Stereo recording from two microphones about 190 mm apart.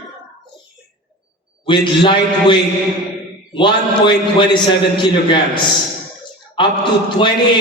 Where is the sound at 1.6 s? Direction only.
25° left (ahead or behind).